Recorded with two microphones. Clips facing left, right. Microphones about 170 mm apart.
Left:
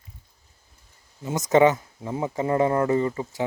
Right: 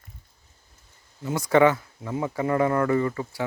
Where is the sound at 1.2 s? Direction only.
25° left (ahead or behind).